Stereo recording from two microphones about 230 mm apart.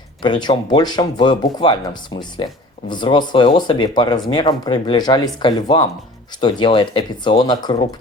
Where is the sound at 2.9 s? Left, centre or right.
Centre.